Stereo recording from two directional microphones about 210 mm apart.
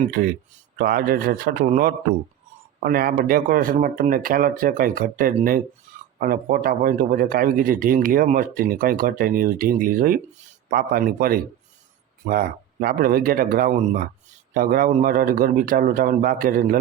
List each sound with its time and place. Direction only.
0.0 s a man's voice: 45° right (ahead or behind)